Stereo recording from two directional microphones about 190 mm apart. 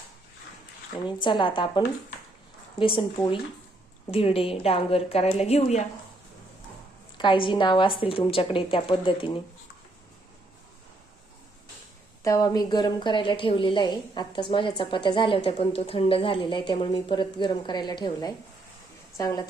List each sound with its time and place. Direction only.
1.0 s a woman's voice: 25° left (ahead or behind)
7.2 s a woman's voice: 25° left (ahead or behind)
12.2 s a woman's voice: 20° left (ahead or behind)